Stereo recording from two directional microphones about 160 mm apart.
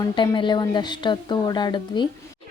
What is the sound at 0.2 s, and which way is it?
A woman's voice, 30° left (ahead or behind).